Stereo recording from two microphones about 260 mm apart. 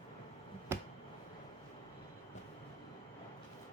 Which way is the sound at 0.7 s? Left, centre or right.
Centre.